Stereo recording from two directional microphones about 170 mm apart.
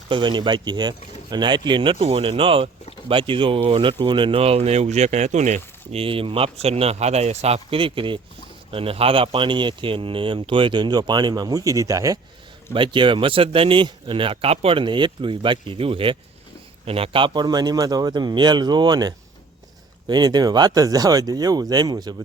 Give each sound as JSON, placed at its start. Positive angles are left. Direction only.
{"t": 0.1, "sound": "speech", "side_deg": -30}